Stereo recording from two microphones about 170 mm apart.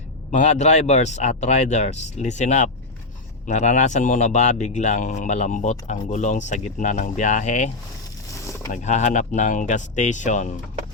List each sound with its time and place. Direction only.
0.3 s a man's voice: 45° left (ahead or behind)
8.7 s a man's voice: 45° left (ahead or behind)